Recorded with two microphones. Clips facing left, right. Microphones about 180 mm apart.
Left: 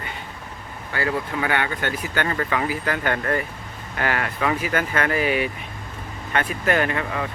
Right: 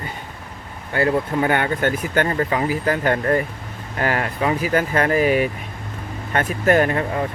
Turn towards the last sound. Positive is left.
turn(degrees=-35)  # may be behind; listen again after turning